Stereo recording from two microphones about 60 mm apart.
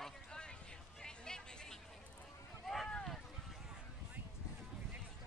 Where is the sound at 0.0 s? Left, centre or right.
Centre.